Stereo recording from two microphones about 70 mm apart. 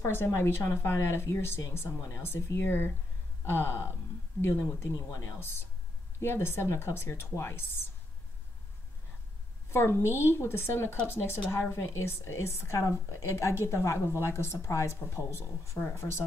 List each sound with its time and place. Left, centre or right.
0.0 s speech: left
9.7 s speech: left